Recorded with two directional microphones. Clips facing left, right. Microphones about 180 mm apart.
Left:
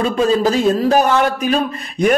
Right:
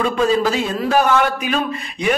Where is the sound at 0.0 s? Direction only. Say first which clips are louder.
Left 2 dB; 40° left (ahead or behind).